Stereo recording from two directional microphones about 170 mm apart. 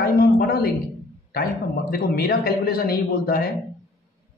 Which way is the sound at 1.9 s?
65° left (ahead or behind).